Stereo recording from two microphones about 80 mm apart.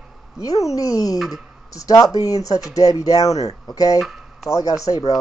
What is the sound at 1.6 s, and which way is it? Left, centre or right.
Speech, left.